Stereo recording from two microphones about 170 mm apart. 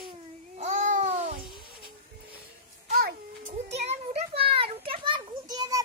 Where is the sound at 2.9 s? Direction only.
65° right (ahead or behind).